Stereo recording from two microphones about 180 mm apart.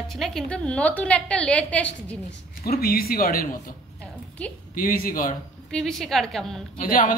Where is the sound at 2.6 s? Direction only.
55° left (ahead or behind).